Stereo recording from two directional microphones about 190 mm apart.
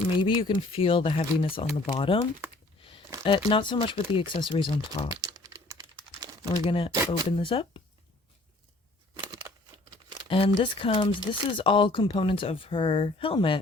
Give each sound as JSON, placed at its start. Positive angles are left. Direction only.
{"t": 0.2, "sound": "speech", "side_deg": 25}
{"t": 3.2, "sound": "speech", "side_deg": 25}
{"t": 5.0, "sound": "typing", "side_deg": -20}
{"t": 6.7, "sound": "speech", "side_deg": 30}
{"t": 9.2, "sound": "crumpling", "side_deg": -20}
{"t": 10.2, "sound": "speech", "side_deg": 30}